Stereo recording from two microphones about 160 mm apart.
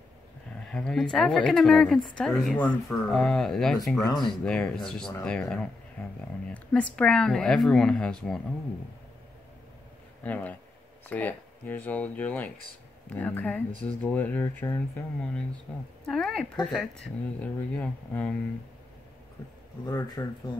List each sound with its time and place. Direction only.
0.7 s speech: 5° left (ahead or behind)
10.2 s speech: 10° left (ahead or behind)
20.2 s speech: 20° left (ahead or behind)